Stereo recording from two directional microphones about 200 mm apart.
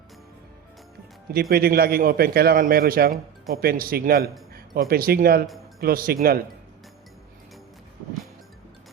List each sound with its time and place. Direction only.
1.3 s a man's voice: 50° right (ahead or behind)